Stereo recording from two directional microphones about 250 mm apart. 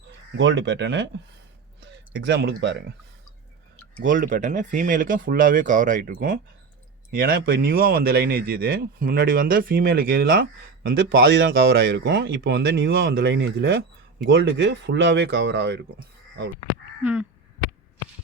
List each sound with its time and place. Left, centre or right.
0.3 s speech: right
2.2 s speech: right
4.0 s speech: right
17.0 s caw: centre